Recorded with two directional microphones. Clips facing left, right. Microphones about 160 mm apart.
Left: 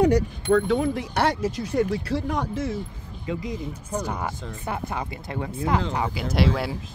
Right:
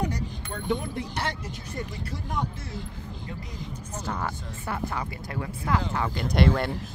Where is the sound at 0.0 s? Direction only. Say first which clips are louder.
Left 11 dB; 85° left.